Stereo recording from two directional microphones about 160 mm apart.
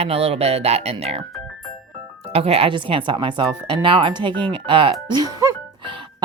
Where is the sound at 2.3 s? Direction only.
40° right (ahead or behind).